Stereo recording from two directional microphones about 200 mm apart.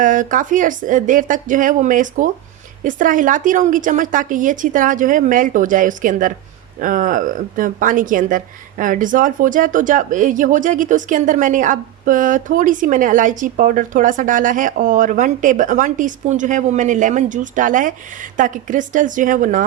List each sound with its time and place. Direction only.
0.0 s speech: 40° right (ahead or behind)